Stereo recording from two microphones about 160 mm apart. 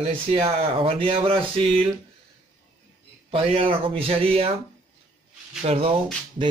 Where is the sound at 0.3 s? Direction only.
35° right (ahead or behind).